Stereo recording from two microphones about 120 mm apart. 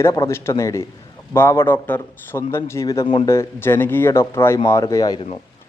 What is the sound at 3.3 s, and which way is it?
Speech, 20° left (ahead or behind).